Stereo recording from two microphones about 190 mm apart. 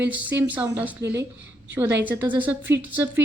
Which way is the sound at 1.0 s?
65° right (ahead or behind).